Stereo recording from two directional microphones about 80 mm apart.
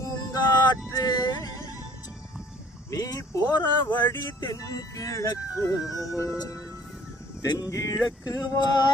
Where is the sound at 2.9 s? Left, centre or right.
Left.